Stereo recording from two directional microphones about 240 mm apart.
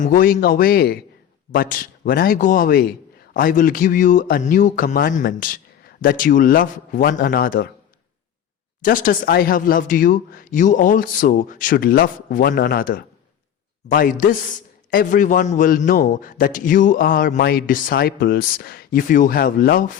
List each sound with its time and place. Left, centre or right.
0.0 s a man's voice: left
8.8 s a man's voice: left